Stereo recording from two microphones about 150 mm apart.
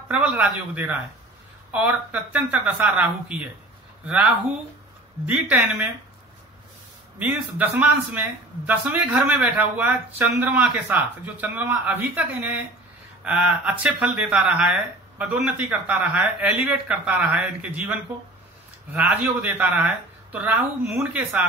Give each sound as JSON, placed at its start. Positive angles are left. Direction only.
{"t": 0.1, "sound": "a man's voice", "side_deg": -5}
{"t": 7.2, "sound": "a man's voice", "side_deg": -10}
{"t": 18.9, "sound": "a man's voice", "side_deg": -5}